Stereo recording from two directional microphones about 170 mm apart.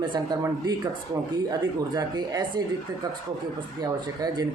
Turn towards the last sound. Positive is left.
turn(degrees=-25)  # may be behind; listen again after turning